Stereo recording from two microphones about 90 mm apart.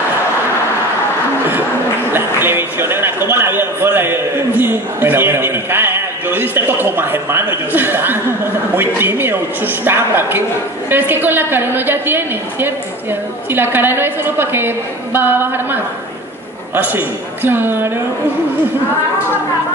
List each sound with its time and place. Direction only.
2.1 s a man's voice: 25° right (ahead or behind)